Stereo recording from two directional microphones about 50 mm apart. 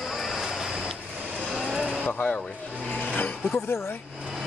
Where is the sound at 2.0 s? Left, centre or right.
Left.